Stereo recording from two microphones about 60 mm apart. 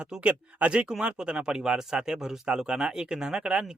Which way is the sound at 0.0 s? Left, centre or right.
Centre.